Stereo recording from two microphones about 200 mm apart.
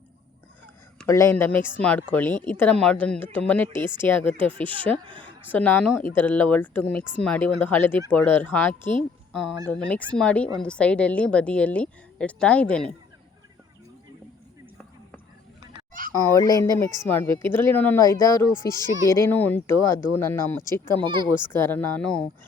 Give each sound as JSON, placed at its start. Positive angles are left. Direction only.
{"t": 1.0, "sound": "a woman's voice", "side_deg": 15}
{"t": 5.0, "sound": "speech", "side_deg": -25}
{"t": 5.5, "sound": "a woman's voice", "side_deg": 10}
{"t": 15.9, "sound": "a sound", "side_deg": -45}
{"t": 16.2, "sound": "speech", "side_deg": 15}
{"t": 18.7, "sound": "speech", "side_deg": -20}
{"t": 19.1, "sound": "speech", "side_deg": 10}
{"t": 21.0, "sound": "speech", "side_deg": -25}
{"t": 21.5, "sound": "speech", "side_deg": 10}